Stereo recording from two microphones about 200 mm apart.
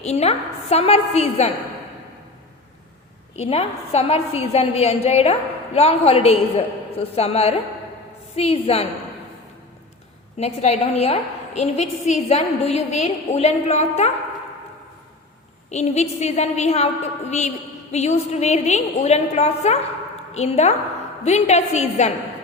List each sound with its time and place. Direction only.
0.0 s a woman's voice: 30° left (ahead or behind)
3.3 s a woman's voice: 30° left (ahead or behind)
10.3 s a woman's voice: 35° left (ahead or behind)
15.7 s a woman's voice: 35° left (ahead or behind)